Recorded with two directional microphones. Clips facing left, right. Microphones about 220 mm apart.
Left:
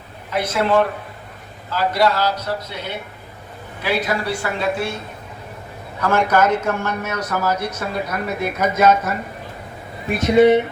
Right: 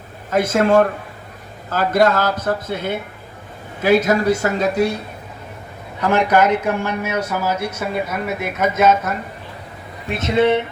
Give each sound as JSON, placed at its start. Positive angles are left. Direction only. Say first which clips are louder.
{"t": 0.3, "sound": "a man's voice", "louder": "right 4 dB", "side_deg": -45}
{"t": 6.0, "sound": "a man's voice", "louder": "right 2 dB", "side_deg": -15}
{"t": 10.2, "sound": "speech", "louder": "left 3 dB", "side_deg": 15}